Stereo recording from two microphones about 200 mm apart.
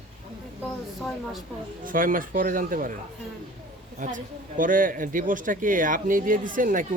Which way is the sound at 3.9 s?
40° right (ahead or behind).